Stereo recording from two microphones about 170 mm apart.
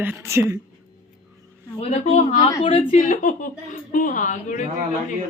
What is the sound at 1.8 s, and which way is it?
A woman's voice, 40° left (ahead or behind).